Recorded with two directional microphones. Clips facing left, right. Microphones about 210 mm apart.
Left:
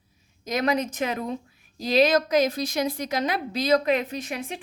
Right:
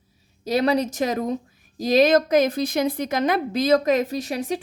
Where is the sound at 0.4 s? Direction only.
35° right (ahead or behind).